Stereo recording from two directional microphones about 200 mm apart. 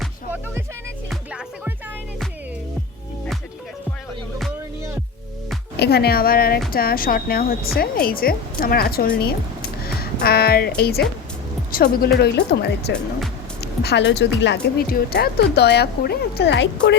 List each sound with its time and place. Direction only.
1.1 s music: 5° right (ahead or behind)
5.7 s speech: 55° left (ahead or behind)
14.8 s speech: 50° left (ahead or behind)